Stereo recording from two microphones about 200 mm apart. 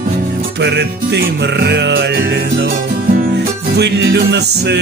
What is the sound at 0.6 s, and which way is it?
Music, 60° right (ahead or behind).